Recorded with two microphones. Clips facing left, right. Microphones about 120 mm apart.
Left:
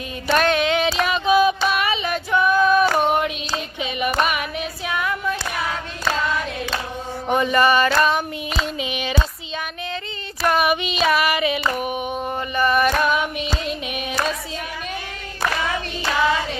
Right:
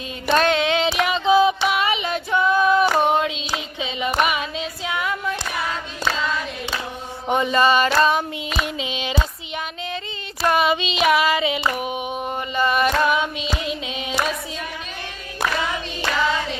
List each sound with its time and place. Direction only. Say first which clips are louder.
0.3 s music: even; 20° right (ahead or behind)
1.6 s female singing: even; 20° right (ahead or behind)
3.8 s a sound: even; 20° right (ahead or behind)
7.3 s a sound: even; 20° right (ahead or behind)
8.6 s child singing: left 1 dB; 20° right (ahead or behind)
10.4 s female singing: even; 25° right (ahead or behind)